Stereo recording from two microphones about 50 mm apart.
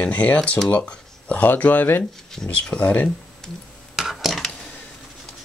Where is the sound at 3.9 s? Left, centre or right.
Centre.